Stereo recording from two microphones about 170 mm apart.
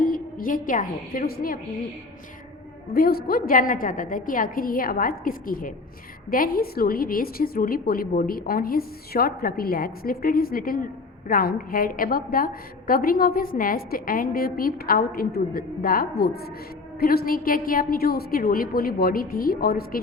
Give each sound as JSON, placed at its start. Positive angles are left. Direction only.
{"t": 0.0, "sound": "a woman's voice", "side_deg": 55}
{"t": 2.9, "sound": "a woman's voice", "side_deg": 60}